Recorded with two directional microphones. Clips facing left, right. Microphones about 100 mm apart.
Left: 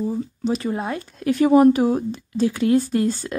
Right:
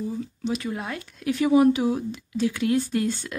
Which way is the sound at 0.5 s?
35° left (ahead or behind).